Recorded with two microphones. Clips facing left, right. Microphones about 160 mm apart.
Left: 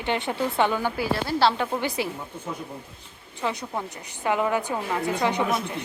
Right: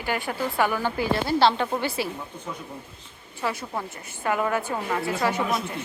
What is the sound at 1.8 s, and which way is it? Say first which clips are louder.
Speech: even; 15° left (ahead or behind).